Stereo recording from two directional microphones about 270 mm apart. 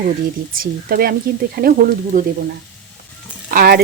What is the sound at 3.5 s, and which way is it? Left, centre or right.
Frying, right.